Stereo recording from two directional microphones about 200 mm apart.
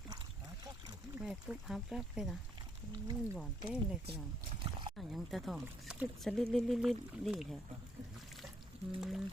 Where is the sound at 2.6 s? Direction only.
20° right (ahead or behind).